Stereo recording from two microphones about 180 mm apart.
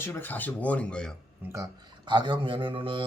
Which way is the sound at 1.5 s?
20° right (ahead or behind).